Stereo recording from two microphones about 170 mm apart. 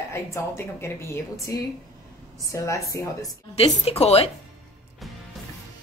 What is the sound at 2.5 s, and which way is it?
Speech, 20° left (ahead or behind).